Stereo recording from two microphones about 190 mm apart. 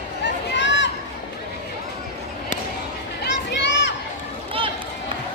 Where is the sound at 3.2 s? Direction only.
70° left (ahead or behind).